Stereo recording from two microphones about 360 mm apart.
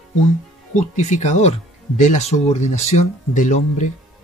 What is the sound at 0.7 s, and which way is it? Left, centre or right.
Speech, centre.